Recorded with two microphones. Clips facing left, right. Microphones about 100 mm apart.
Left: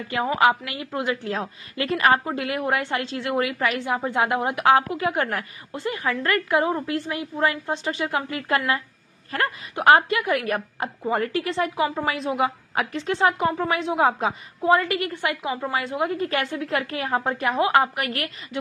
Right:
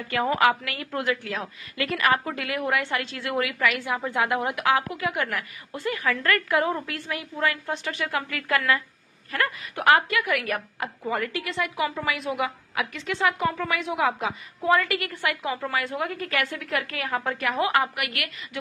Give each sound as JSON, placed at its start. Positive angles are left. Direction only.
{"t": 0.1, "sound": "a woman's voice", "side_deg": 20}